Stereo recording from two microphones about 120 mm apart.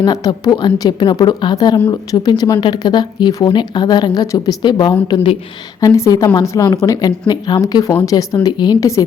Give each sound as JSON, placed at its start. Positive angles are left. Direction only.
{"t": 0.0, "sound": "a woman's voice", "side_deg": 35}